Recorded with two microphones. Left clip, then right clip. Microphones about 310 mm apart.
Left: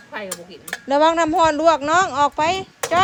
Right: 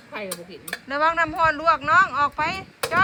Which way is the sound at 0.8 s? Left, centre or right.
Centre.